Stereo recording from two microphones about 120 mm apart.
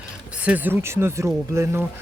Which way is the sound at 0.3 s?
10° right (ahead or behind).